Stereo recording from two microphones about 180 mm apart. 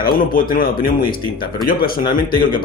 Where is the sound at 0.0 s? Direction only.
50° left (ahead or behind).